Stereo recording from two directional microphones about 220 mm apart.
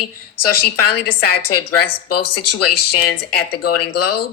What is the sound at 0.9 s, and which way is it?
Speech, 45° left (ahead or behind).